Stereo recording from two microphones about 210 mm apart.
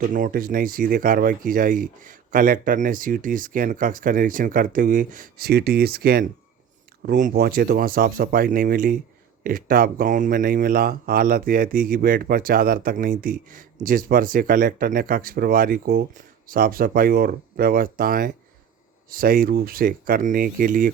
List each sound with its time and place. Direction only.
0.1 s speech: 40° right (ahead or behind)